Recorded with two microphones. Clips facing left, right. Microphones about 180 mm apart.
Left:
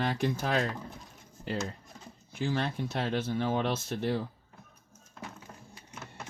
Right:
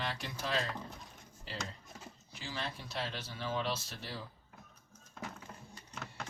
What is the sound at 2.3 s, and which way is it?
Speech, 55° left (ahead or behind).